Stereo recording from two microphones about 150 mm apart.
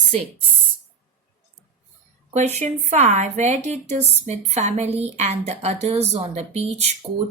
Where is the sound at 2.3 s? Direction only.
50° right (ahead or behind).